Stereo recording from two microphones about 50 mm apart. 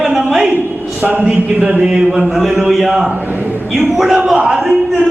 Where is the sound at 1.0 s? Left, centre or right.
Right.